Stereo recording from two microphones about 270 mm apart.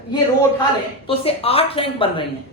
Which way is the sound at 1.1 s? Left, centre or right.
Left.